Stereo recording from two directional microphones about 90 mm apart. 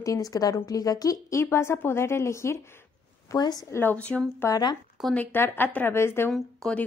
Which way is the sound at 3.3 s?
50° left (ahead or behind).